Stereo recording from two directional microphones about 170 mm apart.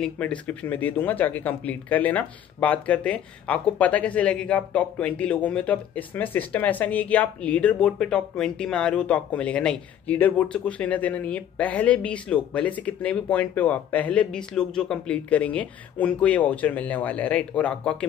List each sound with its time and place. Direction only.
0.0 s speech: 5° left (ahead or behind)